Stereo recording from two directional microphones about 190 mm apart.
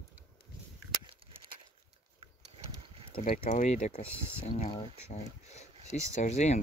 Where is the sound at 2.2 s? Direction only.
30° right (ahead or behind).